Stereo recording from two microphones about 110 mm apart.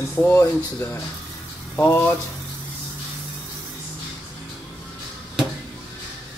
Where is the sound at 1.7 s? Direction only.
20° left (ahead or behind).